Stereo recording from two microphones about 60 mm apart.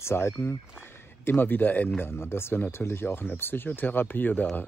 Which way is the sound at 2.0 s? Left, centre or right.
Left.